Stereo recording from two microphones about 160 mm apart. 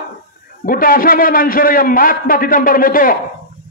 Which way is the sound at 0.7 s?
60° left (ahead or behind).